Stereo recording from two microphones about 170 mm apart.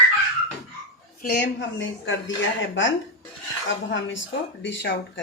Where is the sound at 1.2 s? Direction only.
85° left.